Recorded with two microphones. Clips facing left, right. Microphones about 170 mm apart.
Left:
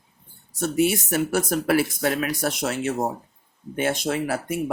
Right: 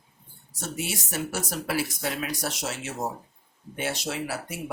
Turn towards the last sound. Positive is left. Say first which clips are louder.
# left 7 dB
turn(degrees=55)  # may be behind; listen again after turning